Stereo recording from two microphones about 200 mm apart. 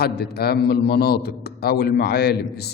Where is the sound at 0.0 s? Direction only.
50° left (ahead or behind).